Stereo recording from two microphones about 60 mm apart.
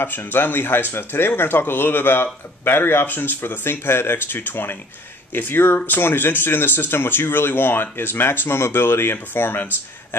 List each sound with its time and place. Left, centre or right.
0.0 s speech: left